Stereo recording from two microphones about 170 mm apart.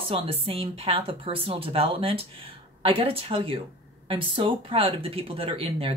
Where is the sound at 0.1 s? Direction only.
35° right (ahead or behind).